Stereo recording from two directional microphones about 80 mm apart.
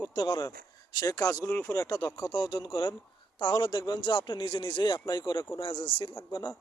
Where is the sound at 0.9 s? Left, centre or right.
Left.